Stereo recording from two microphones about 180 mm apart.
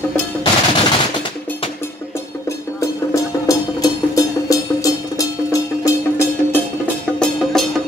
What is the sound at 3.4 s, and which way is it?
Music, 20° left (ahead or behind).